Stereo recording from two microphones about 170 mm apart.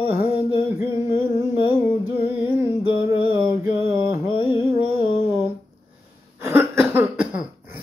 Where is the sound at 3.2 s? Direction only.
10° right (ahead or behind).